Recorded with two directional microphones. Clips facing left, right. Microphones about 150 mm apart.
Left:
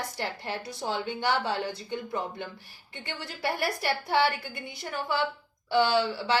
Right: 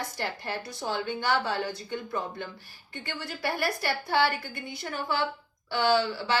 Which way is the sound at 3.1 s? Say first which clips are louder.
Even; 25° left (ahead or behind).